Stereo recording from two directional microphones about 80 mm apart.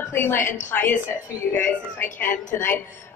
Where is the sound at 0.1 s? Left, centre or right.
Left.